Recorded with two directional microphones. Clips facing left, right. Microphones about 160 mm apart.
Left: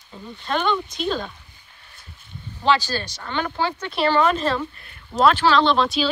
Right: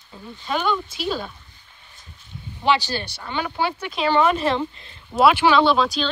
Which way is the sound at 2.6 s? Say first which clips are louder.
Even; 15° right (ahead or behind).